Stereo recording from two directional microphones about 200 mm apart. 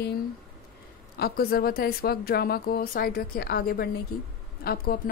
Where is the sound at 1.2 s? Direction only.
50° left (ahead or behind).